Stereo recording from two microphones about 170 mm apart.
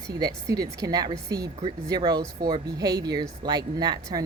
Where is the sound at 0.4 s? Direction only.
20° right (ahead or behind).